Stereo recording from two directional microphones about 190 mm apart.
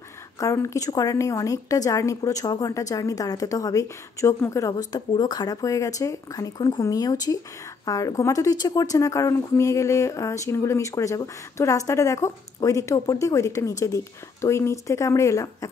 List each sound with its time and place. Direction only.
0.4 s a woman's voice: 15° left (ahead or behind)